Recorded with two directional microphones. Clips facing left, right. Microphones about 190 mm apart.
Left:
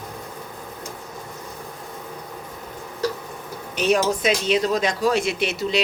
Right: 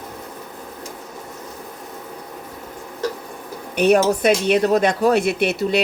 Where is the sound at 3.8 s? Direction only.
60° right (ahead or behind).